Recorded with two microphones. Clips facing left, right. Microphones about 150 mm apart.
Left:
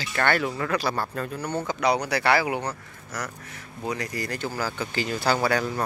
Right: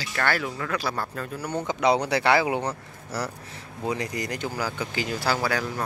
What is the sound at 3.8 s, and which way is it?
Speech, 20° right (ahead or behind).